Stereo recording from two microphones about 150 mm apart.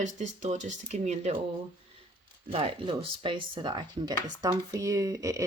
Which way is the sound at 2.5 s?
40° right (ahead or behind).